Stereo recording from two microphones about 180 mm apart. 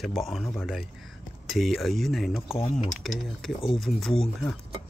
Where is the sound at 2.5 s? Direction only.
35° left (ahead or behind).